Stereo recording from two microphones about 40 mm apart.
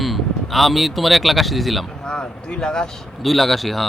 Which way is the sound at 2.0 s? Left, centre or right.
Left.